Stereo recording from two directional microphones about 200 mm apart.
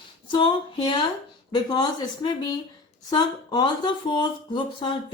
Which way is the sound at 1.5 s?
20° left (ahead or behind).